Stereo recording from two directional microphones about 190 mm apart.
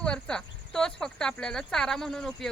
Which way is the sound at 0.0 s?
5° left (ahead or behind).